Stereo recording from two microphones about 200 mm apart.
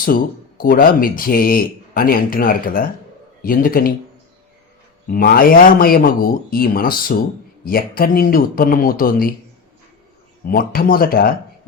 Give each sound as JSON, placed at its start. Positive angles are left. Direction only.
{"t": 0.0, "sound": "speech", "side_deg": 45}
{"t": 5.0, "sound": "speech", "side_deg": 45}
{"t": 10.4, "sound": "speech", "side_deg": 45}